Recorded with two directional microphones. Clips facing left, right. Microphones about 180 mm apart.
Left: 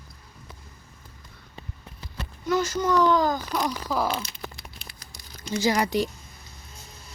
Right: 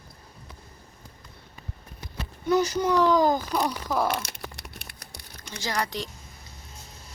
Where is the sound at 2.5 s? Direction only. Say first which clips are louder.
Right 1 dB; 15° right (ahead or behind).